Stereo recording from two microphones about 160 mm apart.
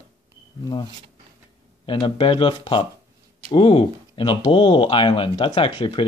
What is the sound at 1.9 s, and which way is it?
Speech, 30° left (ahead or behind).